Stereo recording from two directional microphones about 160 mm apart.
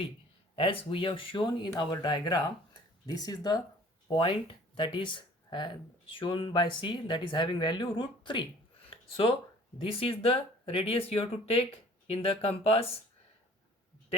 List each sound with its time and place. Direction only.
0.5 s speech: 35° left (ahead or behind)
8.9 s a sound: 35° left (ahead or behind)
9.8 s speech: 35° left (ahead or behind)